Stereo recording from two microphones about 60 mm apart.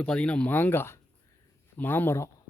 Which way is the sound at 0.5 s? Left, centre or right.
Left.